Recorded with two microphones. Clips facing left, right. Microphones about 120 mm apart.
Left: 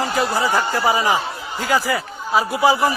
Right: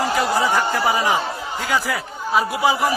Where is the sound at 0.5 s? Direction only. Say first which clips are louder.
Left 1 dB; 15° left (ahead or behind).